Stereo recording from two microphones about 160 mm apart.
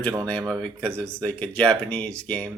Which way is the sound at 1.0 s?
10° left (ahead or behind).